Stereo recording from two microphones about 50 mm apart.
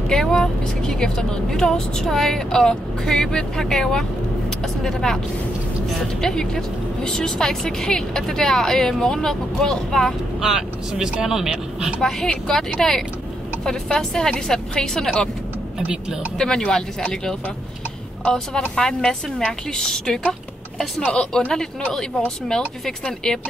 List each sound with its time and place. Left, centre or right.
0.1 s a woman's voice: centre
10.4 s speech: centre
12.3 s a woman's voice: centre
13.7 s a woman's voice: centre
16.3 s a woman's voice: centre